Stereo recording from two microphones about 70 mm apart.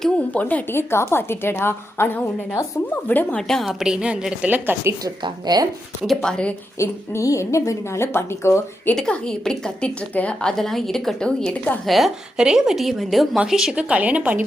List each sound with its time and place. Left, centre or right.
0.3 s a woman's voice: left
0.7 s a woman's voice: left
3.3 s a woman's voice: centre
4.5 s speech: right
5.0 s speech: right
6.2 s a woman's voice: centre
6.7 s a woman's voice: left
7.3 s a woman's voice: left
9.0 s a woman's voice: centre
11.9 s a woman's voice: centre; by 14.4 s right